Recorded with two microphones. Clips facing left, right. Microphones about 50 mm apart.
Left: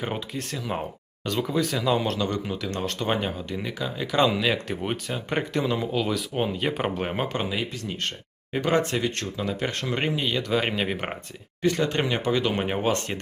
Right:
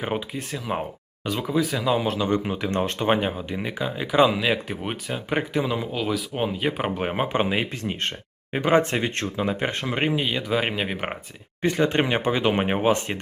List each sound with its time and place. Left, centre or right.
0.0 s speech: centre
2.2 s speech: right
7.3 s speech: right
8.5 s speech: right
11.7 s speech: right